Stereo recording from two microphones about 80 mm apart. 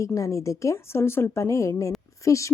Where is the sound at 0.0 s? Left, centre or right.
Left.